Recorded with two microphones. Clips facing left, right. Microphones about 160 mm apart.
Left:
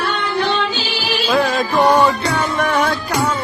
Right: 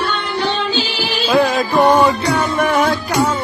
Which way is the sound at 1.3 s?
Centre (ahead or behind).